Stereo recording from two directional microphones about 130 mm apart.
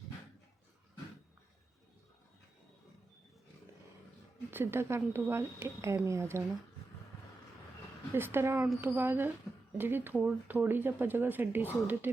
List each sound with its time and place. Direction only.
4.5 s speech: 20° right (ahead or behind)
8.1 s speech: 20° right (ahead or behind)